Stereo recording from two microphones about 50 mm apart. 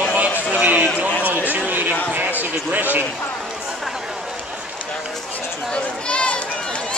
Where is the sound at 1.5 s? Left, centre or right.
Right.